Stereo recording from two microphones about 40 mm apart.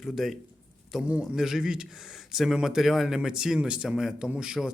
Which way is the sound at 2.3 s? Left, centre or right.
Centre.